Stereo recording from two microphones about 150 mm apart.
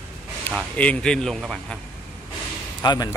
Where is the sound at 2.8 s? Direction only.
25° left (ahead or behind).